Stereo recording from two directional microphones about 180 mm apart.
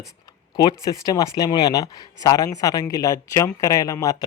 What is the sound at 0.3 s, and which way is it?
Speech, 20° left (ahead or behind).